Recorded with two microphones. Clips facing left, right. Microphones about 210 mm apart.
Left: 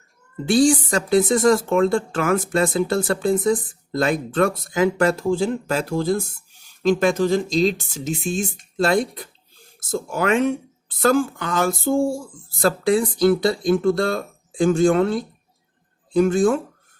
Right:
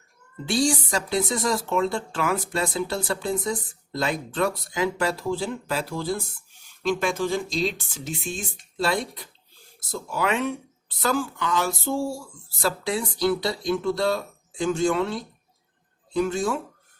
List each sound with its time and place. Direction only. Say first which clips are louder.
0.4 s speech: left 7 dB; 50° left (ahead or behind)